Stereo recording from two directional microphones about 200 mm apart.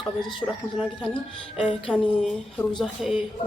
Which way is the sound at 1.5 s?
Centre (ahead or behind).